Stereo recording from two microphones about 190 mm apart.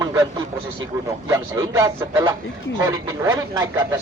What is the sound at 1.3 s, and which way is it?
A man's voice, 15° right (ahead or behind).